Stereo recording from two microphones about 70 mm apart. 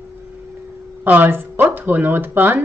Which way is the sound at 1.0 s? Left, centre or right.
Right.